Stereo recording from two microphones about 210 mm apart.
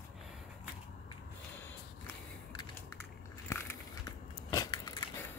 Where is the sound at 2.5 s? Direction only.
20° left (ahead or behind).